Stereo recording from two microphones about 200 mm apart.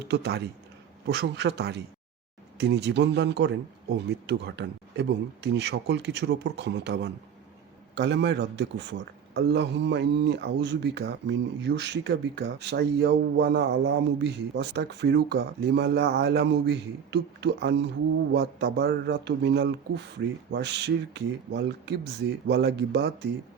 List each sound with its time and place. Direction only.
0.1 s a man's voice: 55° right (ahead or behind)